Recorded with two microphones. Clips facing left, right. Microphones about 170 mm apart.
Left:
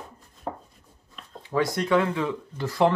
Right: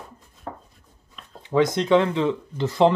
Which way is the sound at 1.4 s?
20° right (ahead or behind).